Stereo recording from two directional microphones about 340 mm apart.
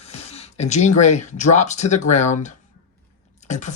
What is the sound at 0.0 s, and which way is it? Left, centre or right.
Speech, centre.